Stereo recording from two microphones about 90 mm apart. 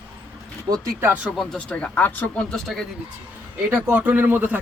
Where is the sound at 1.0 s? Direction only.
15° right (ahead or behind).